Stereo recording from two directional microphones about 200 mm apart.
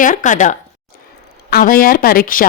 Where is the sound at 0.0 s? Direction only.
40° left (ahead or behind).